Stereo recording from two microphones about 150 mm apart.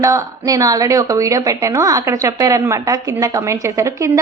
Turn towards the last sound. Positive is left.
turn(degrees=-20)  # may be behind; listen again after turning